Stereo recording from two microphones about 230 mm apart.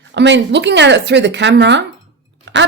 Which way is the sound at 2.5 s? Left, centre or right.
Right.